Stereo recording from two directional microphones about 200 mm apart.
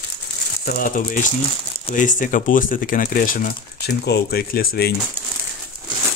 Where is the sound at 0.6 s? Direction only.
45° left (ahead or behind).